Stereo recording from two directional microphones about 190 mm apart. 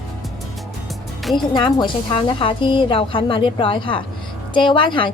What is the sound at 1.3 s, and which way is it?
Speech, 25° left (ahead or behind).